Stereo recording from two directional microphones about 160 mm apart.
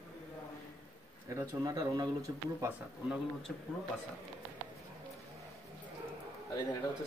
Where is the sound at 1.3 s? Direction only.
20° right (ahead or behind).